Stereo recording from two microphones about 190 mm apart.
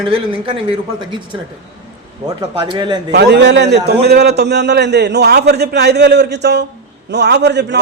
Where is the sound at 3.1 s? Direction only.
60° right (ahead or behind).